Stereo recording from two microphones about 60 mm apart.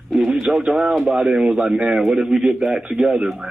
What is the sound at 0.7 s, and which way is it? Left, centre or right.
A man's voice, centre.